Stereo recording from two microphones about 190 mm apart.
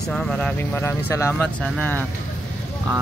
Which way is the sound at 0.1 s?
5° left (ahead or behind).